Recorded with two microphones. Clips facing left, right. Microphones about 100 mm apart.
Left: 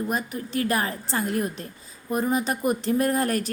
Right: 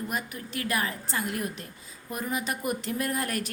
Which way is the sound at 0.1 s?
30° left (ahead or behind).